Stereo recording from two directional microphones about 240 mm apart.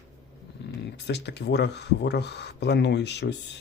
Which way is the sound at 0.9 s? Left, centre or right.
Left.